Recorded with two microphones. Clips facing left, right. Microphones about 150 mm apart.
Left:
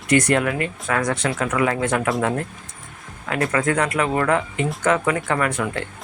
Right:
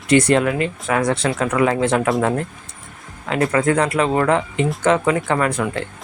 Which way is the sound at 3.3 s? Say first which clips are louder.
Right 4 dB; 25° right (ahead or behind).